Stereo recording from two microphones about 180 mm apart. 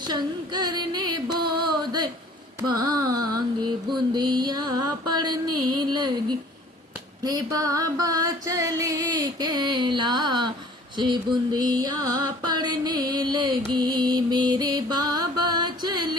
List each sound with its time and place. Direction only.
0.1 s music: 25° right (ahead or behind)
2.6 s carnatic music: 20° right (ahead or behind)
4.1 s music: 25° right (ahead or behind)
7.3 s music: 20° right (ahead or behind)